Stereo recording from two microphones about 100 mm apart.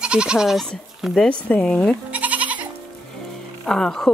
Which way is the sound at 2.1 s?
15° right (ahead or behind).